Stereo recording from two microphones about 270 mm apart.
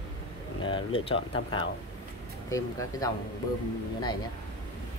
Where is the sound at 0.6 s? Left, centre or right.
Centre.